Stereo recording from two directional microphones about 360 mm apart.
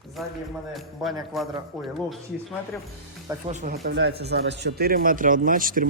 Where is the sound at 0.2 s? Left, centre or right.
Centre.